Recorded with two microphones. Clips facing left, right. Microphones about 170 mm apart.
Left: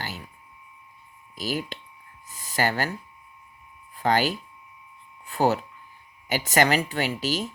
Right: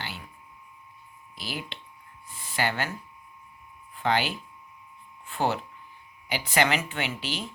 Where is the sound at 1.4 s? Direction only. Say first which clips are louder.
Left 7 dB; 40° left (ahead or behind).